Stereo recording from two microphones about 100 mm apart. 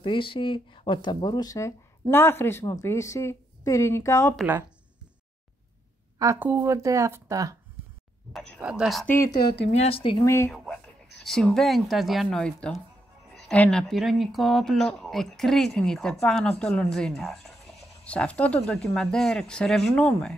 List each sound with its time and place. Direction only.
0.0 s speech: 60° left (ahead or behind); by 1.7 s 40° left (ahead or behind)
2.0 s a woman's voice: 25° left (ahead or behind)
6.1 s a woman's voice: 35° right (ahead or behind)
8.3 s speech: 5° left (ahead or behind)
8.5 s a woman's voice: 10° right (ahead or behind)
9.0 s a woman's voice: 20° left (ahead or behind)
9.8 s speech: 70° left (ahead or behind)
10.2 s a woman's voice: 30° left (ahead or behind)
10.5 s speech: centre (ahead or behind)
13.3 s a sound: 5° left (ahead or behind)
13.6 s speech: 5° left (ahead or behind)
18.0 s speech: 15° left (ahead or behind)